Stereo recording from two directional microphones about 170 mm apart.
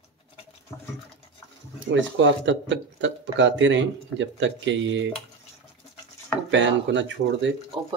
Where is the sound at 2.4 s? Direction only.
90° right.